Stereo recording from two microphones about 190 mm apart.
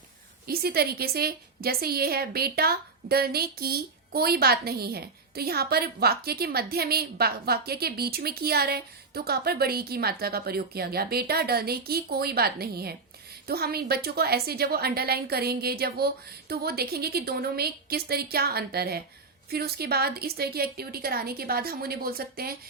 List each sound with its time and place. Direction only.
0.4 s a woman's voice: 55° right (ahead or behind)